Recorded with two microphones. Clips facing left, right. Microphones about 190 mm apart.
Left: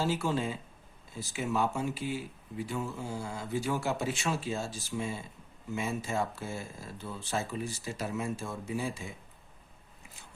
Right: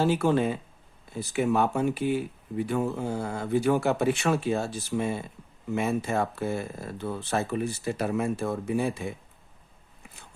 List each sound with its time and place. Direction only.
0.0 s speech: 60° right (ahead or behind)